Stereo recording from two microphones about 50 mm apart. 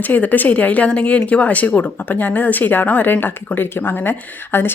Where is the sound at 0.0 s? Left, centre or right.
Left.